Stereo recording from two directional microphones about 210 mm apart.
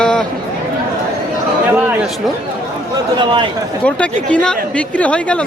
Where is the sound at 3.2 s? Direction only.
20° right (ahead or behind).